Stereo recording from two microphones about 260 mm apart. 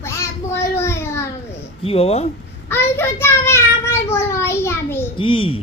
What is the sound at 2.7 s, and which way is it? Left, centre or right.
Child singing, centre.